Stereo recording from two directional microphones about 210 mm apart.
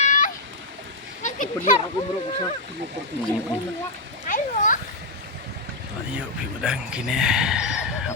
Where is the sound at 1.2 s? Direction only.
35° left (ahead or behind).